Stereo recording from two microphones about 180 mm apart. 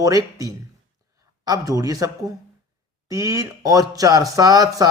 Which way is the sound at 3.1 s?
20° right (ahead or behind).